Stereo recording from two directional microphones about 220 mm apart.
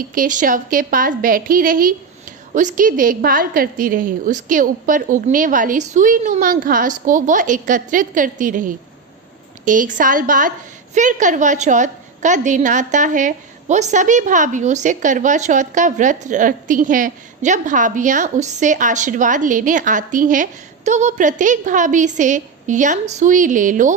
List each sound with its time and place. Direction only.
0.0 s a woman's voice: 40° right (ahead or behind)